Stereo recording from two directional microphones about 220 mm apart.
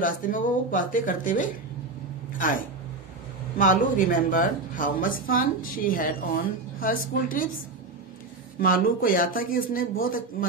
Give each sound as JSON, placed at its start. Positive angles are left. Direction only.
{"t": 0.0, "sound": "speech", "side_deg": 40}
{"t": 8.5, "sound": "speech", "side_deg": 40}